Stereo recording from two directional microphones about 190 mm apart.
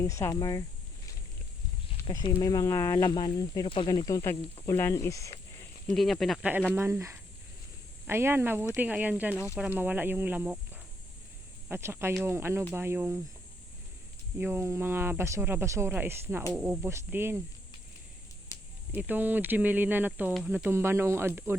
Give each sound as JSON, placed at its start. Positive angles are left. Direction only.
{"t": 0.0, "sound": "speech", "side_deg": 15}
{"t": 2.0, "sound": "a sound", "side_deg": 15}
{"t": 2.3, "sound": "speech", "side_deg": 15}
{"t": 5.9, "sound": "speech", "side_deg": 0}
{"t": 6.7, "sound": "speech", "side_deg": -15}
{"t": 14.3, "sound": "speech", "side_deg": -10}
{"t": 18.5, "sound": "a sound", "side_deg": 15}
{"t": 18.9, "sound": "speech", "side_deg": -10}